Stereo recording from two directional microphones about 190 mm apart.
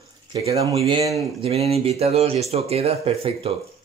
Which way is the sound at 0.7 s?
30° right (ahead or behind).